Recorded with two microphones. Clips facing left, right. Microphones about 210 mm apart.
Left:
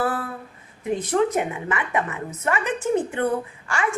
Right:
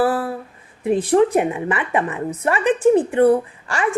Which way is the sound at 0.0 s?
30° right (ahead or behind).